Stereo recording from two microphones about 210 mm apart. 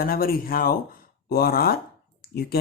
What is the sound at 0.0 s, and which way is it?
Speech, 45° left (ahead or behind).